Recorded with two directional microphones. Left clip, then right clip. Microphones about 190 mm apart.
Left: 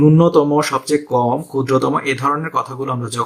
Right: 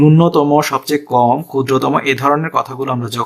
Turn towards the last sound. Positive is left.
turn(degrees=-35)  # may be behind; listen again after turning